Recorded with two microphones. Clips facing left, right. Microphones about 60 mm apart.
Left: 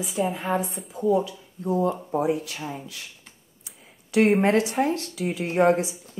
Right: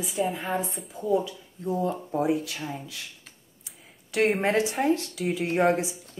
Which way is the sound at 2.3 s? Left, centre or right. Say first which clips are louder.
Even; centre.